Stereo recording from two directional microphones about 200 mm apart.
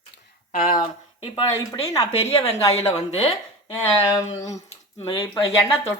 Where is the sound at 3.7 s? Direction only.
20° left (ahead or behind).